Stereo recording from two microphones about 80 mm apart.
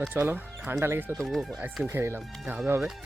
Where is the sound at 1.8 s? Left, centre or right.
Right.